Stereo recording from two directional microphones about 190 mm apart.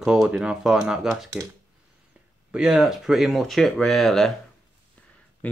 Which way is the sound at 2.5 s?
5° right (ahead or behind).